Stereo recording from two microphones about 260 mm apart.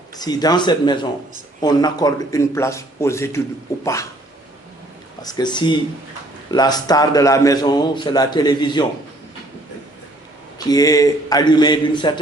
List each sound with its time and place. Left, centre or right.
0.2 s a man's voice: centre
5.2 s a man's voice: centre
10.6 s a man's voice: centre